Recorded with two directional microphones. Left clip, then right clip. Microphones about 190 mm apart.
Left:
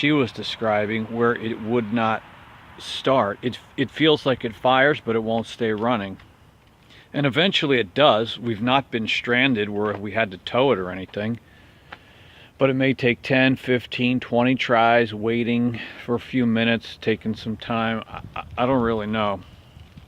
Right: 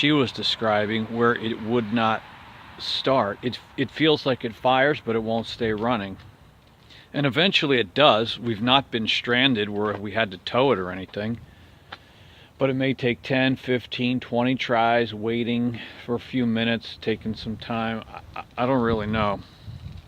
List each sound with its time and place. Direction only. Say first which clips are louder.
0.0 s speech: even; 5° left (ahead or behind)
12.5 s speech: left 4 dB; 20° left (ahead or behind); by 19.4 s centre (ahead or behind)